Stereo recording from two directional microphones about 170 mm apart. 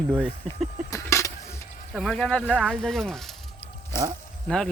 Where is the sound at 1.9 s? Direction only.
5° left (ahead or behind).